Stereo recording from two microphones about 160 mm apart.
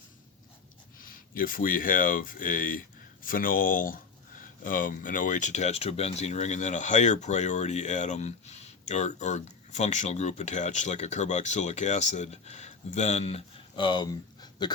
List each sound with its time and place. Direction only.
0.9 s speech: 60° left (ahead or behind); by 14.7 s 25° left (ahead or behind)